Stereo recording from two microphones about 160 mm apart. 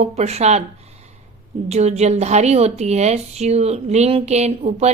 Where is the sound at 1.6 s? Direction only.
45° right (ahead or behind).